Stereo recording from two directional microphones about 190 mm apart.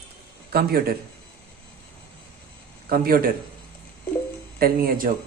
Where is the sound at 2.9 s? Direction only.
50° right (ahead or behind).